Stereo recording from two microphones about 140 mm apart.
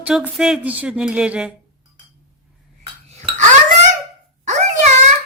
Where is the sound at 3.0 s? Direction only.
55° right (ahead or behind).